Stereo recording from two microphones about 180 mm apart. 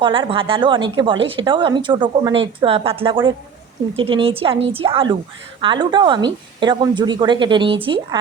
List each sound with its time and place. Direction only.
0.0 s a woman's voice: 30° right (ahead or behind)